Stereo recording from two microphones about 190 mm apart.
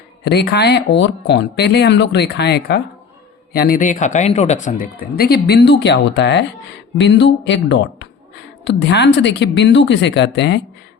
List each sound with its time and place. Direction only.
0.3 s speech: 60° left (ahead or behind)